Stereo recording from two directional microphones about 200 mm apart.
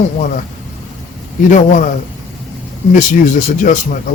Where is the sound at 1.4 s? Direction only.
40° left (ahead or behind).